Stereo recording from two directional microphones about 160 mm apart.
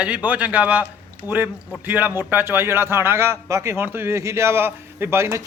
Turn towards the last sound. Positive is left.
turn(degrees=-15)  # may be behind; listen again after turning